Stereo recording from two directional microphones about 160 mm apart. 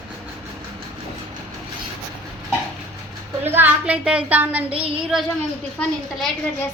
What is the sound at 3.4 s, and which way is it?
Speech, 15° right (ahead or behind).